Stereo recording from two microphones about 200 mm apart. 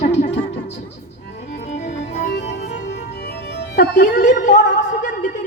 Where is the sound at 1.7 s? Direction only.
35° left (ahead or behind).